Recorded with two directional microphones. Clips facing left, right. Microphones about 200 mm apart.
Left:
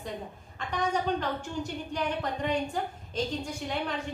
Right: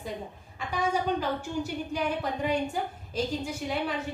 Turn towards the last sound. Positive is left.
turn(degrees=-5)  # may be behind; listen again after turning